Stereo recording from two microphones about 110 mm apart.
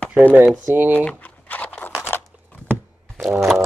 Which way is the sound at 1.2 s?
15° left (ahead or behind).